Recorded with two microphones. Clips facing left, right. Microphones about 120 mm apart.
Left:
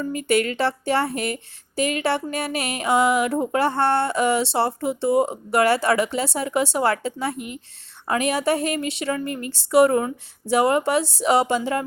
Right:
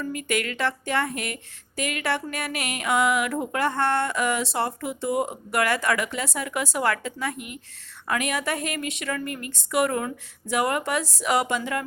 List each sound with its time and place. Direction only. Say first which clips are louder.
0.0 s speech: left 6 dB; 30° left (ahead or behind)